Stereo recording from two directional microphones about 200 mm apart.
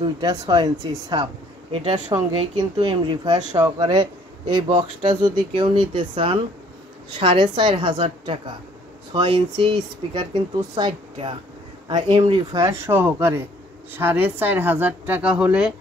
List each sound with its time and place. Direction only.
0.0 s speech: 20° right (ahead or behind)